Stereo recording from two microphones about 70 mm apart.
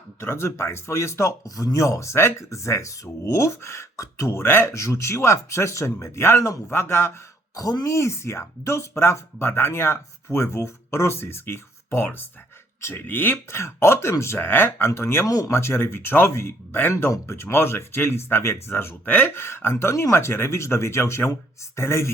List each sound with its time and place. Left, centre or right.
0.2 s speech: left
1.5 s speech: left
4.7 s speech: left
7.5 s speech: left
7.9 s speech: left
15.3 s speech: left
15.5 s speech: left